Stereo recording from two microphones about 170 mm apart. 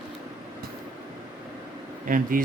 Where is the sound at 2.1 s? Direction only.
55° right (ahead or behind).